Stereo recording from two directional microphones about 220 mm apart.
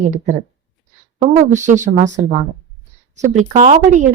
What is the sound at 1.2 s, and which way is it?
Speech, 35° right (ahead or behind).